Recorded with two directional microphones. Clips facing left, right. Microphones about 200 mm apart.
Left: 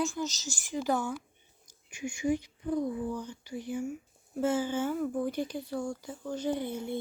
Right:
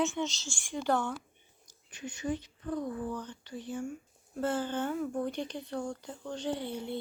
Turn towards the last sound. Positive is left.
turn(degrees=10)  # may be behind; listen again after turning